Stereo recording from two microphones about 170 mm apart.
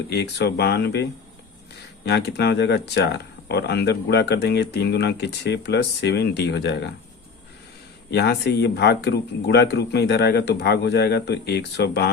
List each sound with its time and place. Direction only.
0.1 s speech: 75° left (ahead or behind)
2.0 s speech: 80° left
8.1 s speech: 75° left (ahead or behind)